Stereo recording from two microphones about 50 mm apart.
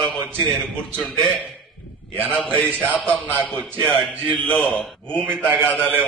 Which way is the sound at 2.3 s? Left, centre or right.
Left.